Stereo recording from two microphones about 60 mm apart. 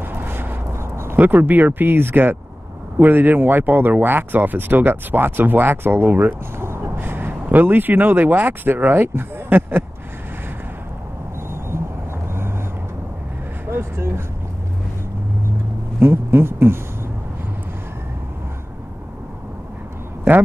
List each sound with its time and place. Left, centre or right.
0.0 s vehicle: right
0.7 s a sound: right
1.1 s speech: right
13.7 s speech: right
16.0 s speech: right